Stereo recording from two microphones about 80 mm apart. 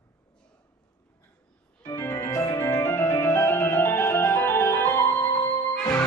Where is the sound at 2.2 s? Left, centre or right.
Left.